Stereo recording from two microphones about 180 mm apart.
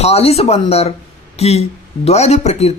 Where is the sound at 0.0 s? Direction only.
35° left (ahead or behind).